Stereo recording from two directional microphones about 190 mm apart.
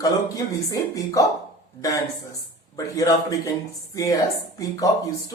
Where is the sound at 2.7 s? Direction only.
20° left (ahead or behind).